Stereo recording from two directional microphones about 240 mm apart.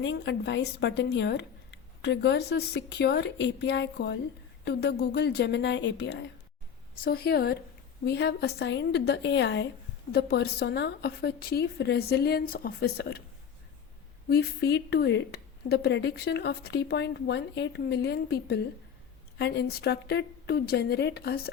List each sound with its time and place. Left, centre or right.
0.0 s a woman's voice: left
14.3 s speech: left